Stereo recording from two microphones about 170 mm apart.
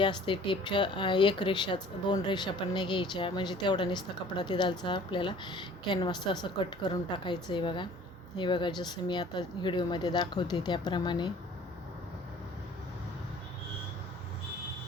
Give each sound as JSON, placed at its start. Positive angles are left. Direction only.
{"t": 0.0, "sound": "speech", "side_deg": 30}